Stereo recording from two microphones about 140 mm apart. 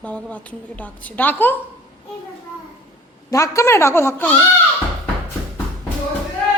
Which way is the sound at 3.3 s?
20° left (ahead or behind).